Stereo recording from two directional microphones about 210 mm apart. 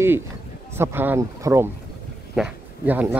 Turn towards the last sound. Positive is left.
turn(degrees=-10)  # may be behind; listen again after turning